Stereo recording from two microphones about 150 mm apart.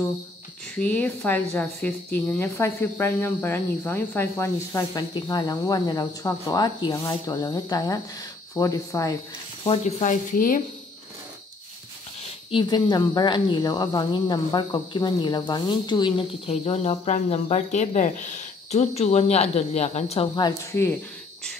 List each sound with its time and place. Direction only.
0.7 s speech: 10° left (ahead or behind)
9.7 s speech: 50° left (ahead or behind)
12.4 s speech: 30° left (ahead or behind)